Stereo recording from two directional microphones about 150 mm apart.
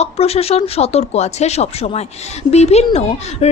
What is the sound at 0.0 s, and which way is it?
Speech, 45° left (ahead or behind).